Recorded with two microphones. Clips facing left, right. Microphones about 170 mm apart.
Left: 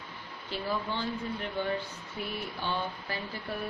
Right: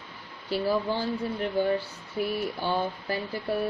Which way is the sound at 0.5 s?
40° right (ahead or behind).